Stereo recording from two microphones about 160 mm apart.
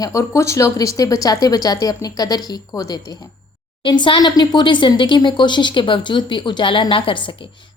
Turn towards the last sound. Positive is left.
turn(degrees=30)  # may be behind; listen again after turning